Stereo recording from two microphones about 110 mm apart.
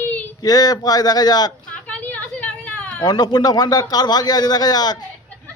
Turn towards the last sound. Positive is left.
turn(degrees=35)  # may be behind; listen again after turning